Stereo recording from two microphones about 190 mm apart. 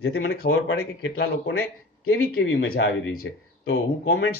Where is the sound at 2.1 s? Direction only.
90° left.